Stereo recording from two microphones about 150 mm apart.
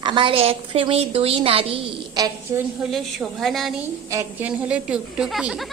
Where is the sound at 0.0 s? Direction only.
30° right (ahead or behind).